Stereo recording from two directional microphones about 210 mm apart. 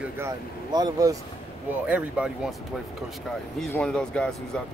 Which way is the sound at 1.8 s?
5° right (ahead or behind).